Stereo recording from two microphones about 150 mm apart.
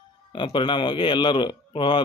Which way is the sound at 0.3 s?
30° left (ahead or behind).